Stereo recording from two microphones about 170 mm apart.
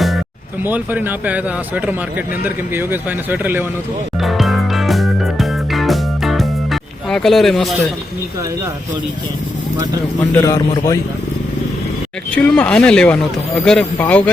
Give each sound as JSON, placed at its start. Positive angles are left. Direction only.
{"t": 0.6, "sound": "speech", "side_deg": -10}
{"t": 4.2, "sound": "music", "side_deg": 0}
{"t": 10.3, "sound": "speech", "side_deg": 15}
{"t": 12.3, "sound": "speech", "side_deg": 5}